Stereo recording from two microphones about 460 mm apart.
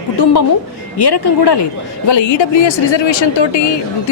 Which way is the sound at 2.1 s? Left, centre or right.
Left.